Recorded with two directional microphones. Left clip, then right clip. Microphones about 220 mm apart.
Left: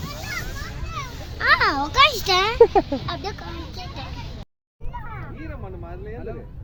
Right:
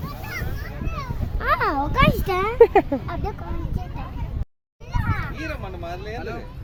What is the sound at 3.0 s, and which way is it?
Speech, centre (ahead or behind).